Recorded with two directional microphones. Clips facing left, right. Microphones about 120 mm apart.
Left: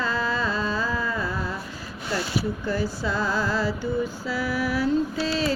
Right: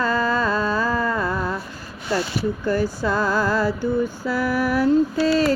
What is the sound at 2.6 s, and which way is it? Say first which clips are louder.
Speech: right 5 dB; 50° right (ahead or behind).